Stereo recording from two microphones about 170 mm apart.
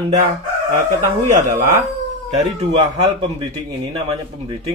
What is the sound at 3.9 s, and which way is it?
Speech, 35° right (ahead or behind).